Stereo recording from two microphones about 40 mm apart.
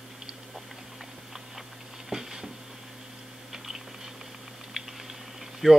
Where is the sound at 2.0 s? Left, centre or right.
Centre.